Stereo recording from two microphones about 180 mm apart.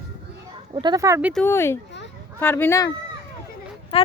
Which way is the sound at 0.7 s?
25° right (ahead or behind).